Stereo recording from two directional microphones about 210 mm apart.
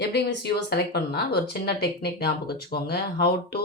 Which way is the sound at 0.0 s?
50° left (ahead or behind).